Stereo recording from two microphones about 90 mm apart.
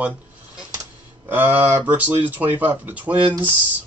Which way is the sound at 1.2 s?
20° right (ahead or behind).